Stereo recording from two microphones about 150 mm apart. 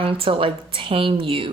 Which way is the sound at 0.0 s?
35° right (ahead or behind).